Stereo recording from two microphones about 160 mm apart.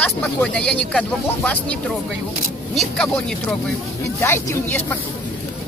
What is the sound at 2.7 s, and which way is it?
Speech, 5° left (ahead or behind).